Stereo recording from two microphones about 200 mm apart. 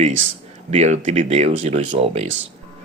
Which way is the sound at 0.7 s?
35° right (ahead or behind).